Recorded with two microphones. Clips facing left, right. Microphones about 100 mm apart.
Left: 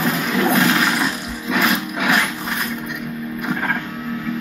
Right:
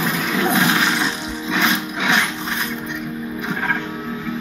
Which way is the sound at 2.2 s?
5° left (ahead or behind).